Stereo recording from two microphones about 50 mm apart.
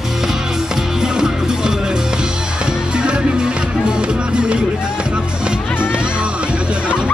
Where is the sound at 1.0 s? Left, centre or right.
Centre.